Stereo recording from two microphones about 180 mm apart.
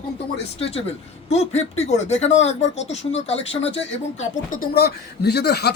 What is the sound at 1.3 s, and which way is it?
Speech, 35° left (ahead or behind).